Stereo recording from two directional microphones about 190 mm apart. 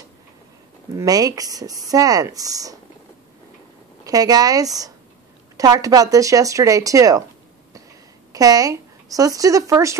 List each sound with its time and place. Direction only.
0.9 s speech: 20° right (ahead or behind)
4.0 s speech: 20° right (ahead or behind)
8.3 s a woman's voice: 20° right (ahead or behind)